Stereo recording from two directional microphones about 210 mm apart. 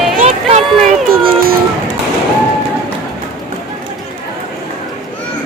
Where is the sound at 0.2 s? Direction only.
35° right (ahead or behind).